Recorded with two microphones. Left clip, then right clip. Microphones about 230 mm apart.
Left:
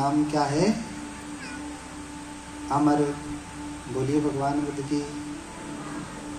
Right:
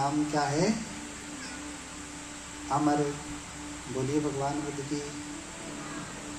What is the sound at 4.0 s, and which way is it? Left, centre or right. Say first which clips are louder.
Speech: left 5 dB; left.